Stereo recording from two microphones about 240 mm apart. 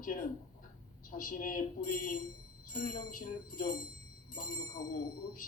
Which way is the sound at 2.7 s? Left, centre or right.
Left.